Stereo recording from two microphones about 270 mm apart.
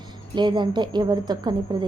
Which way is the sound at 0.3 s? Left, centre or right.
Centre.